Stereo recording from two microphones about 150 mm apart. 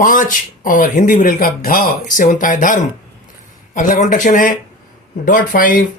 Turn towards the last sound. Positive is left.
turn(degrees=65)  # may be behind; listen again after turning